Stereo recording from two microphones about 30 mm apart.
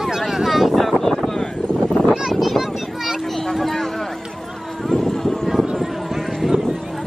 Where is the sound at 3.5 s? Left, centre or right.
Centre.